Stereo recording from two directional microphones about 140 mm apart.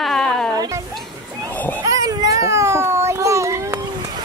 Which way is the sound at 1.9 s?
25° right (ahead or behind).